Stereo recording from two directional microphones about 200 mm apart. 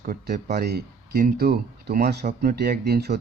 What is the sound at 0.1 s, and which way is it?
Speech, 45° right (ahead or behind).